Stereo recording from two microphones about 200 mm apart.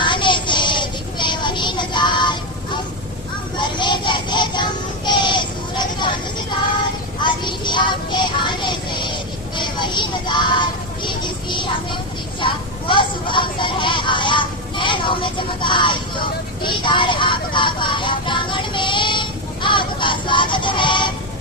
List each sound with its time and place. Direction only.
0.0 s child singing: 25° left (ahead or behind)
3.8 s child singing: 25° left (ahead or behind)
7.2 s music: 25° left (ahead or behind)
12.4 s vehicle: 25° left (ahead or behind)
16.6 s music: 25° left (ahead or behind)